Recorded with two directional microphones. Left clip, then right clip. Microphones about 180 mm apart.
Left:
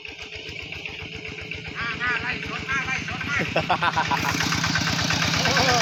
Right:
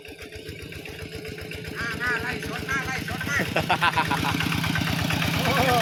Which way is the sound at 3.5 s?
30° left (ahead or behind).